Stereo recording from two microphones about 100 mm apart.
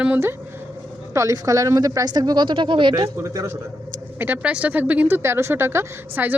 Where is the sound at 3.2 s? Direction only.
30° right (ahead or behind).